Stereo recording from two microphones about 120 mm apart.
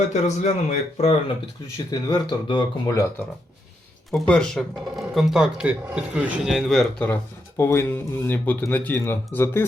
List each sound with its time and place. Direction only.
0.1 s speech: 75° left (ahead or behind)
1.9 s speech: 35° left (ahead or behind)
2.8 s speech: 30° left (ahead or behind)
4.3 s speech: 5° left (ahead or behind)
7.0 s speech: 20° left (ahead or behind)